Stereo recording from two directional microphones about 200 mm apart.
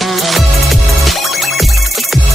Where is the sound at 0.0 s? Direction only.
Centre (ahead or behind).